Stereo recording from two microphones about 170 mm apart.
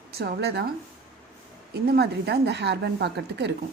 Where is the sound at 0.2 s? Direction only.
70° right (ahead or behind).